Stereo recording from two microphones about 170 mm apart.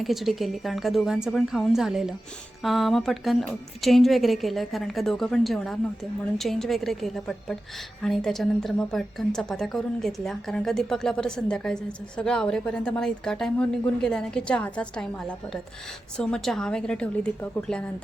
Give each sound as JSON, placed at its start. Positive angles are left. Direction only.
{"t": 0.0, "sound": "a woman's voice", "side_deg": 0}